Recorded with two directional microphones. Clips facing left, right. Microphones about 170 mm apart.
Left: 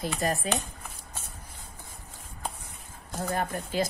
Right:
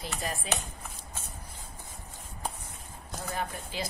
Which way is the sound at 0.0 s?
45° left (ahead or behind).